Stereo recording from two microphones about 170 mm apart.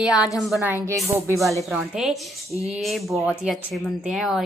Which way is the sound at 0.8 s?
20° right (ahead or behind).